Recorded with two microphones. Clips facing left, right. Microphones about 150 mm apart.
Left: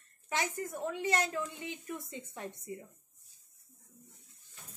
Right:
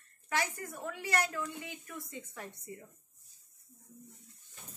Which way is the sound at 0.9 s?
20° left (ahead or behind).